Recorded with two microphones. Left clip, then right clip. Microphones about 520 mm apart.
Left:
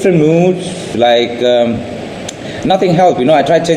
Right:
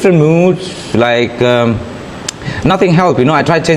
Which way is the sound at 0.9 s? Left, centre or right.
Right.